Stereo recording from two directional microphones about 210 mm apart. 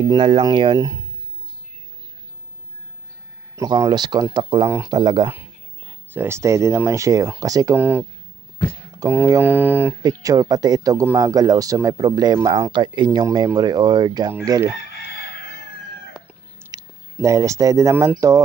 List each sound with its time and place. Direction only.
0.1 s speech: 20° right (ahead or behind)
3.5 s speech: 15° right (ahead or behind)
16.1 s chicken: 5° right (ahead or behind)
16.7 s speech: 15° right (ahead or behind)